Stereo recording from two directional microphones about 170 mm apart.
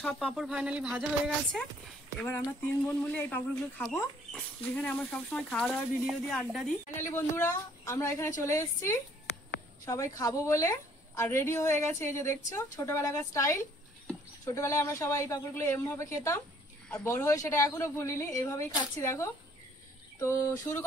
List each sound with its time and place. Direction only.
0.0 s speech: centre (ahead or behind)
2.9 s speech: 10° left (ahead or behind)
7.0 s a woman's voice: 15° left (ahead or behind)
10.1 s a woman's voice: 20° left (ahead or behind)